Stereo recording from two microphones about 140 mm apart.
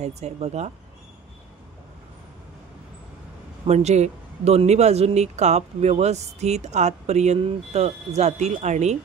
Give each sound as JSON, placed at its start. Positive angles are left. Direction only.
{"t": 0.0, "sound": "speech", "side_deg": -50}
{"t": 3.6, "sound": "speech", "side_deg": -50}